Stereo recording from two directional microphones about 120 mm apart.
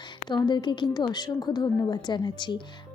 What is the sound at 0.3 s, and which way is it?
A woman's voice, 40° left (ahead or behind).